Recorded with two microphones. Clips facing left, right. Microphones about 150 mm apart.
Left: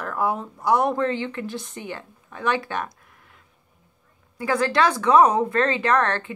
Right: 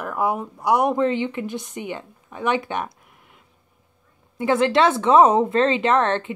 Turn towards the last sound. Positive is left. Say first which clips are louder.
# right 2 dB
turn(degrees=-20)  # may be behind; listen again after turning